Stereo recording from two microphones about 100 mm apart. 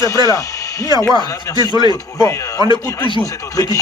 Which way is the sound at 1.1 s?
45° right (ahead or behind).